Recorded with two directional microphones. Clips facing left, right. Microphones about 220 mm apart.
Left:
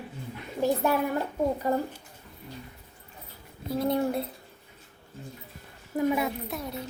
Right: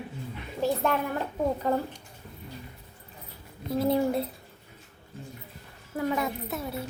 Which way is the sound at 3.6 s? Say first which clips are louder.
Right 1 dB; centre (ahead or behind).